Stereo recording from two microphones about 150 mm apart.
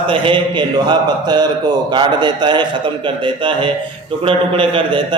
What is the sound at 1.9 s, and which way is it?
A man's voice, 30° right (ahead or behind).